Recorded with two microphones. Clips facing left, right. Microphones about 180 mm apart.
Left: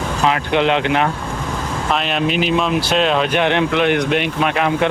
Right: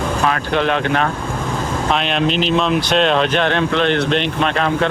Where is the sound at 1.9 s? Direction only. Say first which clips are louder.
Even; 5° left (ahead or behind).